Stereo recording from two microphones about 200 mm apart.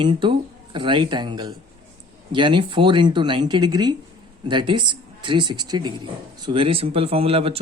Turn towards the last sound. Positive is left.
turn(degrees=-30)  # may be behind; listen again after turning